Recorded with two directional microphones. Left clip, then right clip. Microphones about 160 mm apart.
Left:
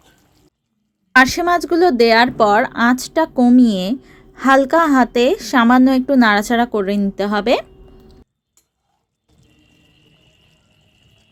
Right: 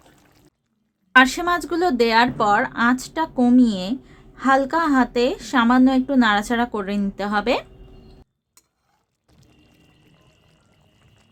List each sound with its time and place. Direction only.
1.1 s speech: 20° left (ahead or behind)